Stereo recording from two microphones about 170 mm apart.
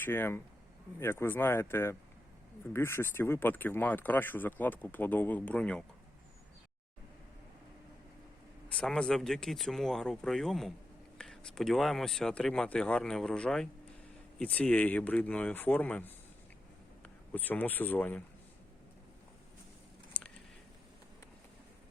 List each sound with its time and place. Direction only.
0.0 s speech: 15° left (ahead or behind)
8.7 s speech: 5° left (ahead or behind)
17.3 s speech: 10° left (ahead or behind)
20.1 s a sound: 5° left (ahead or behind)